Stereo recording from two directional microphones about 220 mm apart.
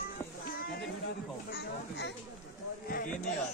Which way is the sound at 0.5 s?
40° left (ahead or behind).